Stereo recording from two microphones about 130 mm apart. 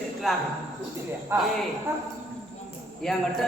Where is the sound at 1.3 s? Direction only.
20° right (ahead or behind).